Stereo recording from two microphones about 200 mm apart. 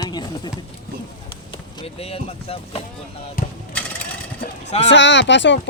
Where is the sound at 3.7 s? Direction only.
5° left (ahead or behind).